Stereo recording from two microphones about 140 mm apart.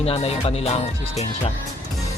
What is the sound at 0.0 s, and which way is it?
Speech, 45° left (ahead or behind).